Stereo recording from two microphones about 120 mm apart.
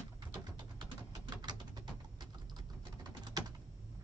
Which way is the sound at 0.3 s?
35° right (ahead or behind).